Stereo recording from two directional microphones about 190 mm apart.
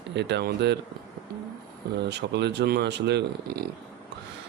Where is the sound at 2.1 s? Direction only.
65° right (ahead or behind).